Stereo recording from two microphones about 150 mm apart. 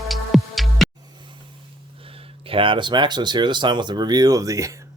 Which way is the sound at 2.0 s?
35° right (ahead or behind).